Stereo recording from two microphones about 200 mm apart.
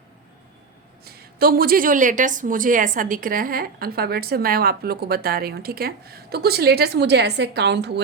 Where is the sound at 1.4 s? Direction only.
50° right (ahead or behind).